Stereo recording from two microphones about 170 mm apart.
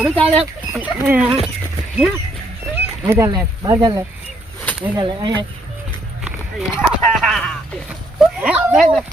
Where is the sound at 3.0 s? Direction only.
15° right (ahead or behind).